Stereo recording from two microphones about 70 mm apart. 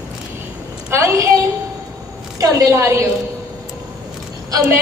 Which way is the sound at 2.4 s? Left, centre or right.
Right.